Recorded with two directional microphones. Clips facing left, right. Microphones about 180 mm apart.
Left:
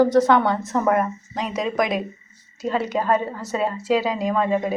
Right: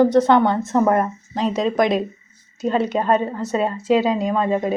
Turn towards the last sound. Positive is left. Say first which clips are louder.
# right 1 dB
turn(degrees=-20)  # may be behind; listen again after turning